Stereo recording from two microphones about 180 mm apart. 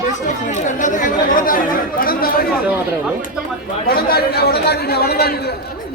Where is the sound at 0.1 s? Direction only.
45° left (ahead or behind).